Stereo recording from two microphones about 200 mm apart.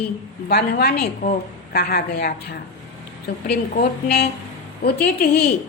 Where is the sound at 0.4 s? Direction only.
50° left (ahead or behind).